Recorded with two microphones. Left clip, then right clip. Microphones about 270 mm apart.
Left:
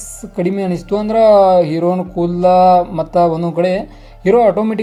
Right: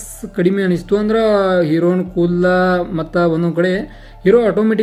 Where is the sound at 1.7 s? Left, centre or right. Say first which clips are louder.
Even; left.